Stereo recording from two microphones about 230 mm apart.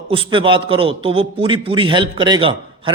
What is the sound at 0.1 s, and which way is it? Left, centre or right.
A man's voice, right.